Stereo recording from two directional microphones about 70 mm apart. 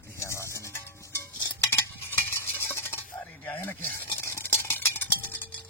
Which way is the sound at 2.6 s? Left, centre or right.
Left.